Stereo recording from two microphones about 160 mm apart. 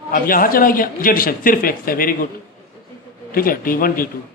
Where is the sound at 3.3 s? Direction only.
65° left (ahead or behind).